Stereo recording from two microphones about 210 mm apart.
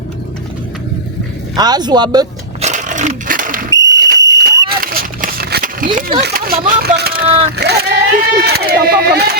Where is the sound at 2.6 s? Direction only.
35° right (ahead or behind).